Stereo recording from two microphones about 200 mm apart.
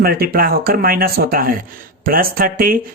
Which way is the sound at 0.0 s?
50° right (ahead or behind).